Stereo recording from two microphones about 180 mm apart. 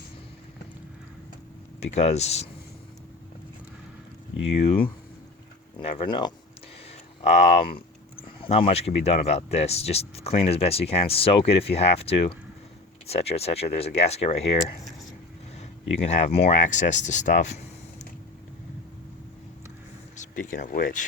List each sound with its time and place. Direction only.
1.8 s speech: 35° left (ahead or behind)
4.6 s speech: 35° left (ahead or behind)
7.2 s speech: 40° left (ahead or behind)
16.0 s speech: 35° left (ahead or behind)
20.1 s speech: 45° left (ahead or behind)